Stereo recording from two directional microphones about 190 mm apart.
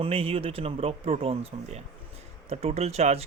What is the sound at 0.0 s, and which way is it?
Speech, 30° right (ahead or behind).